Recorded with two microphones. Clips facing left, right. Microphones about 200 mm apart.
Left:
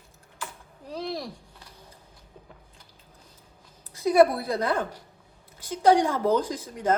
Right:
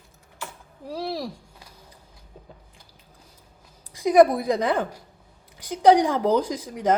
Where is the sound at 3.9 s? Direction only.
15° right (ahead or behind).